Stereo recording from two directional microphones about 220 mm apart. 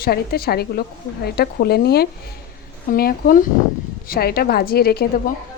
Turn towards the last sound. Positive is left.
turn(degrees=45)  # may be behind; listen again after turning